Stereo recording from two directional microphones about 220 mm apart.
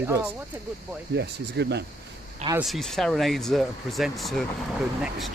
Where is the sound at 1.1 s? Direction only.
50° right (ahead or behind).